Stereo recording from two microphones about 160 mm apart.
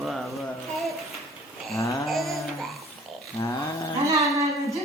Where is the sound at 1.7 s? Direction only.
20° left (ahead or behind).